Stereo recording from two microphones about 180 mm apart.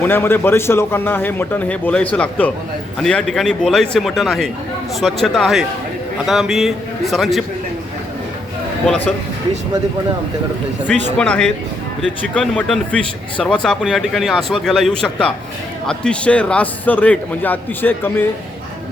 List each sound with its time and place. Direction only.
0.0 s a man's voice: 15° left (ahead or behind)
10.8 s a man's voice: 10° left (ahead or behind)